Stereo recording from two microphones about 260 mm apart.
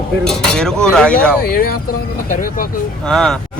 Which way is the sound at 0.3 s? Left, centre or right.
Centre.